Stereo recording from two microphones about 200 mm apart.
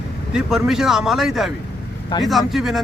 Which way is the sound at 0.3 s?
Centre (ahead or behind).